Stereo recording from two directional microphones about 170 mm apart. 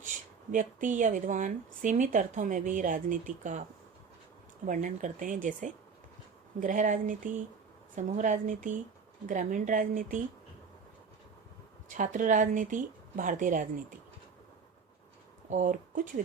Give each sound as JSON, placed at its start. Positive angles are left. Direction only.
{"t": 0.5, "sound": "speech", "side_deg": -50}
{"t": 4.6, "sound": "speech", "side_deg": -45}
{"t": 11.9, "sound": "speech", "side_deg": -50}
{"t": 15.4, "sound": "speech", "side_deg": -50}